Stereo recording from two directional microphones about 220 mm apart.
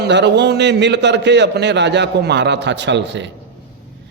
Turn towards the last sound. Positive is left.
turn(degrees=-55)  # may be behind; listen again after turning